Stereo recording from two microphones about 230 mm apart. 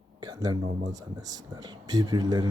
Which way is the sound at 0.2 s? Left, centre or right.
Centre.